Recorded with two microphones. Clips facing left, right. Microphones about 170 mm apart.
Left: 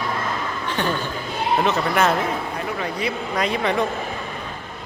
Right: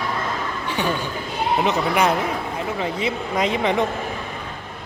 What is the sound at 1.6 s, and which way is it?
A man's voice, 15° right (ahead or behind).